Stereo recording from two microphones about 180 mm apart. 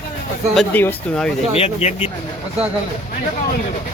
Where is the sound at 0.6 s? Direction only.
5° left (ahead or behind).